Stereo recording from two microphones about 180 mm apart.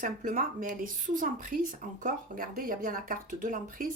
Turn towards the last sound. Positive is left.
turn(degrees=-50)  # may be behind; listen again after turning